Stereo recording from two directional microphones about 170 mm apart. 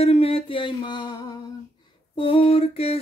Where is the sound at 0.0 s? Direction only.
35° left (ahead or behind).